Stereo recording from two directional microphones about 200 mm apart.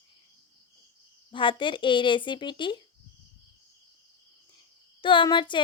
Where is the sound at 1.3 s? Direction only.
25° left (ahead or behind).